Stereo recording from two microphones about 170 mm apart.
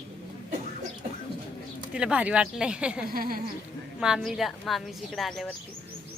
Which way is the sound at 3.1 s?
60° right (ahead or behind).